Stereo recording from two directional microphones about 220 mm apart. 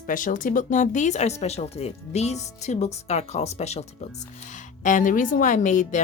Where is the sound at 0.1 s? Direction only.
35° left (ahead or behind).